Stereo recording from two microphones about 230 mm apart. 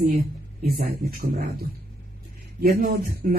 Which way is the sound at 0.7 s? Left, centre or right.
Right.